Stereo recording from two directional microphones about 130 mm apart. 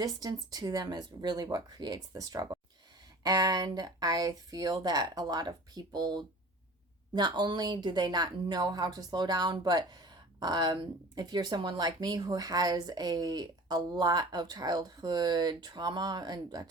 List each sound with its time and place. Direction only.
0.0 s speech: 30° right (ahead or behind)